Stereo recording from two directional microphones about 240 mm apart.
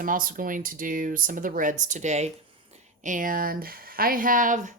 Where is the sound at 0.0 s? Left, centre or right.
Right.